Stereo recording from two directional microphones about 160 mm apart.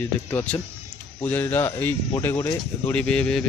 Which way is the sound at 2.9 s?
5° left (ahead or behind).